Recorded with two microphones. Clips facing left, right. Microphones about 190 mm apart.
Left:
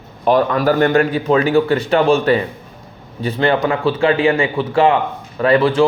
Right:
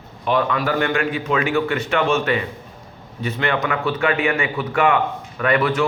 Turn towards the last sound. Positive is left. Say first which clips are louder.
# left 6 dB
turn(degrees=30)  # may be behind; listen again after turning